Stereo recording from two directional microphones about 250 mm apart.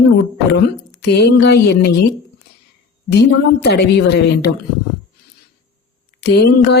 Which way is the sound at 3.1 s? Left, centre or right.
Left.